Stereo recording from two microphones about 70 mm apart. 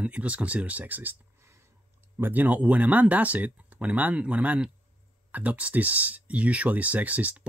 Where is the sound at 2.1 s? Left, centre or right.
Right.